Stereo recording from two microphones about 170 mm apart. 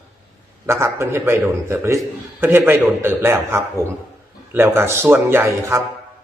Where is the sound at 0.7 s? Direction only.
15° right (ahead or behind).